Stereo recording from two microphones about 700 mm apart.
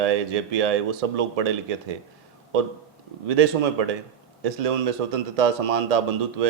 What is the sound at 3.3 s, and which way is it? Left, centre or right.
A man's voice, right.